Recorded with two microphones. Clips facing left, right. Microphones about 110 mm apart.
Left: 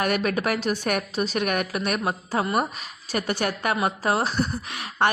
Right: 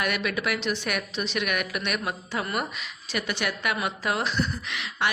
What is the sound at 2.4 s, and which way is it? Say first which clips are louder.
Speech: left 6 dB; 25° left (ahead or behind).